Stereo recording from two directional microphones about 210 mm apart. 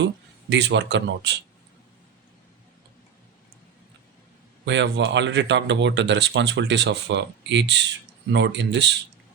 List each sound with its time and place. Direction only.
0.5 s speech: 55° right (ahead or behind)
4.6 s speech: 60° right (ahead or behind)